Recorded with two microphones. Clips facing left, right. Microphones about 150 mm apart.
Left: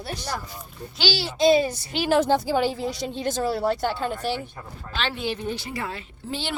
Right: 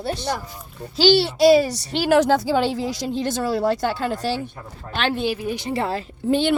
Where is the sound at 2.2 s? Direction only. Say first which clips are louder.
Right 2 dB; 90° right.